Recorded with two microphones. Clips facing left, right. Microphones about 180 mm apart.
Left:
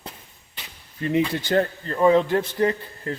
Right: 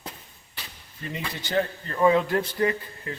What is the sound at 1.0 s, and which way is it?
Speech, 60° left (ahead or behind).